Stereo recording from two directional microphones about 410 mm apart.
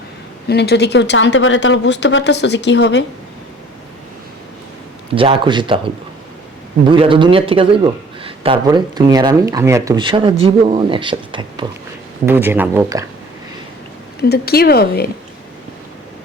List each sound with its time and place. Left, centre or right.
0.4 s a woman's voice: left
5.1 s a man's voice: centre
6.8 s a man's voice: centre
14.2 s a woman's voice: left